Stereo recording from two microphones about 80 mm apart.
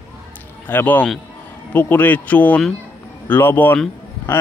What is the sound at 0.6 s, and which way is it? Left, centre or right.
A man's voice, left.